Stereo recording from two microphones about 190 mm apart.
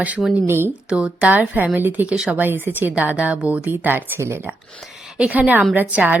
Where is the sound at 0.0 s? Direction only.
5° right (ahead or behind).